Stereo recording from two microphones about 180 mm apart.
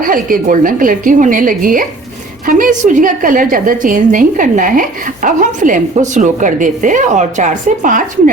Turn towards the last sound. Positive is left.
turn(degrees=-45)  # may be behind; listen again after turning